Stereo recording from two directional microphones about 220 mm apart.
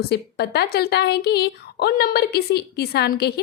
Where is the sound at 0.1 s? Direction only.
50° left (ahead or behind).